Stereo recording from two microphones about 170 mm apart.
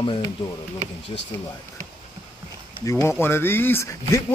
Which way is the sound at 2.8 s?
15° left (ahead or behind).